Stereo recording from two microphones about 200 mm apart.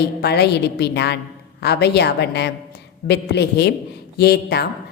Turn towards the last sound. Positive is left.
turn(degrees=55)  # may be behind; listen again after turning